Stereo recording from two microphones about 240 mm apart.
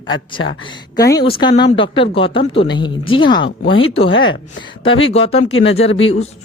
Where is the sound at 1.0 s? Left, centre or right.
Centre.